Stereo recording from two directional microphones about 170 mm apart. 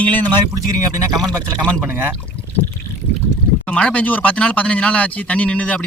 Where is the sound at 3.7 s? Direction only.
5° left (ahead or behind).